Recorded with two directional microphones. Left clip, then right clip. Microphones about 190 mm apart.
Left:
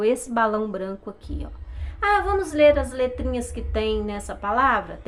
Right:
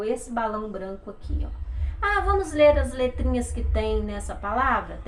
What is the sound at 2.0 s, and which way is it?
A woman's voice, 30° left (ahead or behind).